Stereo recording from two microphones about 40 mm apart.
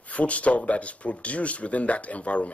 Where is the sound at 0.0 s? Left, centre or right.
Left.